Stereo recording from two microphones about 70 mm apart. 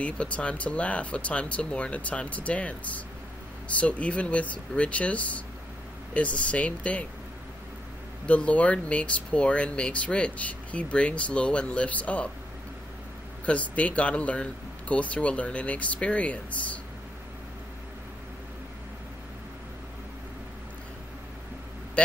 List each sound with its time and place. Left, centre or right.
0.0 s speech: centre
8.3 s speech: centre
13.5 s speech: centre
22.0 s vehicle: centre